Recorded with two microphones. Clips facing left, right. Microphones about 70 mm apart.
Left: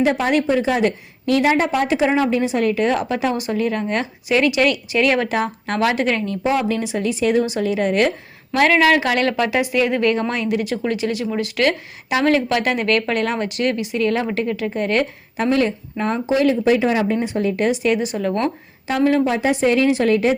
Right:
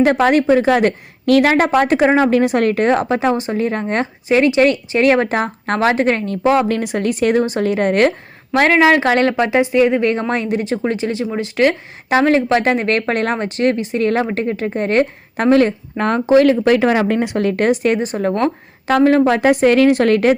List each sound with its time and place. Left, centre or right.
0.0 s a woman's voice: right
8.5 s a woman's voice: right
16.0 s speech: right
17.7 s a woman's voice: right
18.9 s a woman's voice: right